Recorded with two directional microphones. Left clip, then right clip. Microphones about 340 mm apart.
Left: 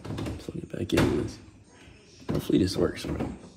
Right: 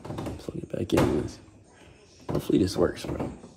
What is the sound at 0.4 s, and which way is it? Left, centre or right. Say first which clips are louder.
Typing: right 2 dB; centre.